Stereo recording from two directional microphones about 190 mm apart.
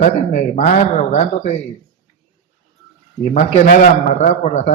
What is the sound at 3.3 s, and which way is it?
A man's voice, 40° left (ahead or behind).